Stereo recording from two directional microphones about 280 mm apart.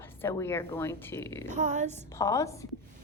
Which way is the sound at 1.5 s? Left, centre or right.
Right.